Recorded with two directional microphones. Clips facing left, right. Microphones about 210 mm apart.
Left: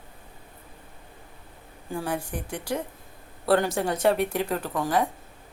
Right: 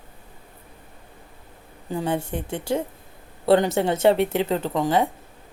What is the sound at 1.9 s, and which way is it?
Speech, 25° right (ahead or behind).